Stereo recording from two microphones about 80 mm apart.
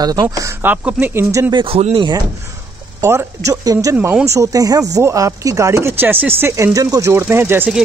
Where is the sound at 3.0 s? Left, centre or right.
Right.